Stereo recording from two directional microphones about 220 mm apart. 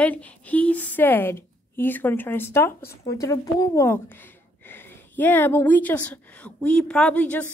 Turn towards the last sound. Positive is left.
turn(degrees=5)  # may be behind; listen again after turning